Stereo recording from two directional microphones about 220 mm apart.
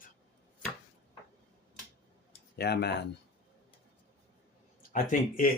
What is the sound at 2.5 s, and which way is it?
Speech, 45° left (ahead or behind).